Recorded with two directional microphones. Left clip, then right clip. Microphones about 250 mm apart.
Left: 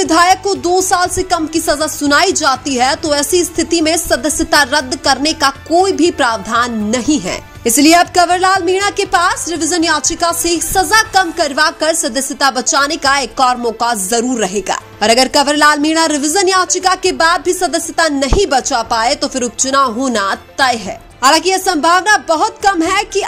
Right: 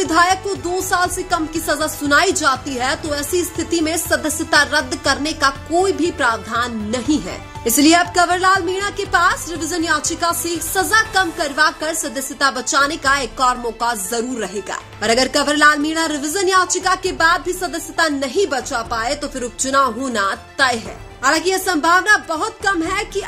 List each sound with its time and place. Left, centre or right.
0.0 s speech: left